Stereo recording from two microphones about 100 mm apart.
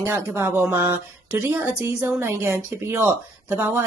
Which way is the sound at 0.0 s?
30° right (ahead or behind).